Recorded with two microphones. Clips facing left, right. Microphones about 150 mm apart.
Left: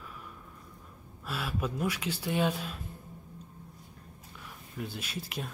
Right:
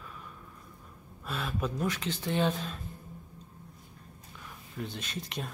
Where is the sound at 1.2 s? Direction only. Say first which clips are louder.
Even; 5° left (ahead or behind).